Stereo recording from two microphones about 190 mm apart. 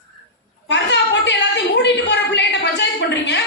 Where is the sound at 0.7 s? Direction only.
70° left (ahead or behind).